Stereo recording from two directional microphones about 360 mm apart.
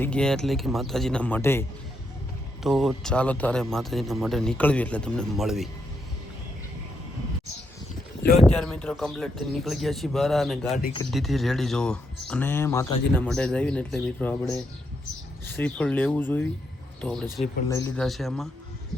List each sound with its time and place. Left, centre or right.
0.0 s speech: centre
2.6 s speech: centre
8.3 s speech: centre